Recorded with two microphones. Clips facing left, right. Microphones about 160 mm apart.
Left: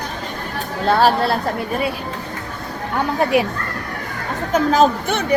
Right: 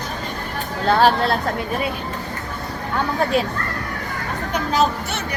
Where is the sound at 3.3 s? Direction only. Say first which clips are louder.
Left 4 dB; 10° left (ahead or behind).